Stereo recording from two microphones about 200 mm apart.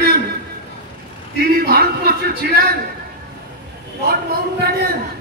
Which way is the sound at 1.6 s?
50° right (ahead or behind).